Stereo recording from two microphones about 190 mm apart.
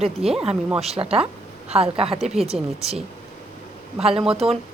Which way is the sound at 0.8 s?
30° right (ahead or behind).